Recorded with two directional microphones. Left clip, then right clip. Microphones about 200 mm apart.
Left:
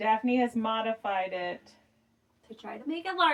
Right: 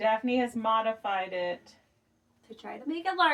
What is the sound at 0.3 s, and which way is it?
Speech, 20° left (ahead or behind).